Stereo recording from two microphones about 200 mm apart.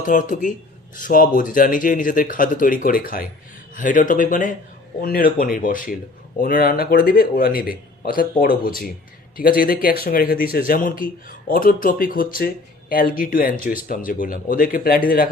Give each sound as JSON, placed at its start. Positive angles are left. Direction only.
{"t": 0.0, "sound": "speech", "side_deg": 40}